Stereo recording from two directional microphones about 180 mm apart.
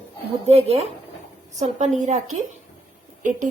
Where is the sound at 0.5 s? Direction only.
35° right (ahead or behind).